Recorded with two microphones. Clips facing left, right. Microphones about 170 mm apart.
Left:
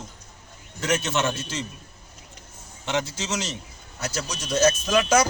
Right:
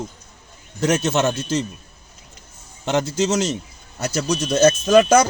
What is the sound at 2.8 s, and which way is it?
A man's voice, 45° right (ahead or behind).